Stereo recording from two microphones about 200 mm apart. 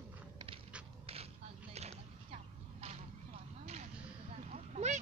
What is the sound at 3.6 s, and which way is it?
Basketball bounce, 30° right (ahead or behind).